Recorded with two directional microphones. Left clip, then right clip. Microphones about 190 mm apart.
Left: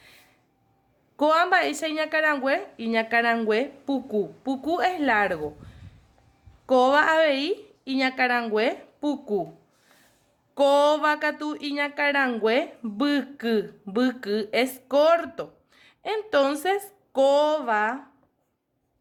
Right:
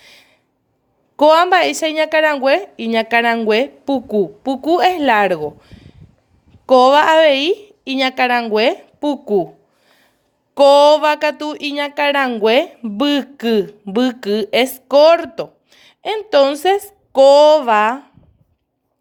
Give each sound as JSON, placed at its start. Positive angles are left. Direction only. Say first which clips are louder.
{"t": 0.0, "sound": "a sound", "louder": "right 9 dB", "side_deg": -35}
{"t": 1.1, "sound": "speech", "louder": "right 10 dB", "side_deg": -30}
{"t": 10.5, "sound": "speech", "louder": "right 11 dB", "side_deg": -30}